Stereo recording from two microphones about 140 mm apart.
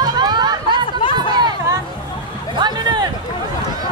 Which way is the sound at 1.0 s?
40° left (ahead or behind).